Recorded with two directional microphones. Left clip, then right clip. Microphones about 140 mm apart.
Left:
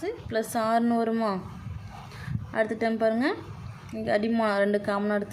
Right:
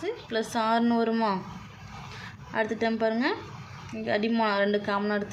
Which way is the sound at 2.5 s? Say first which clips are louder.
Left 1 dB; 10° left (ahead or behind).